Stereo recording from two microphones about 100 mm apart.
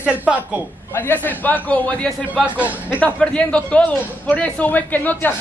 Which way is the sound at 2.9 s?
10° left (ahead or behind).